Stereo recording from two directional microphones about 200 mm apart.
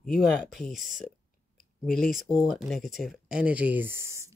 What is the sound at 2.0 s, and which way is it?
Speech, 40° right (ahead or behind).